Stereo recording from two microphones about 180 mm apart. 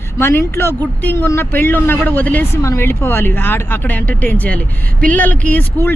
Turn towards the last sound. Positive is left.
turn(degrees=10)  # may be behind; listen again after turning